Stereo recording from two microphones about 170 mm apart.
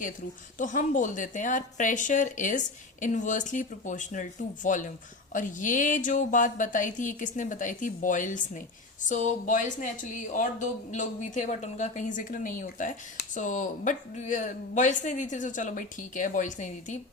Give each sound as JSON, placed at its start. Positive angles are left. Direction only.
{"t": 0.6, "sound": "a woman's voice", "side_deg": 50}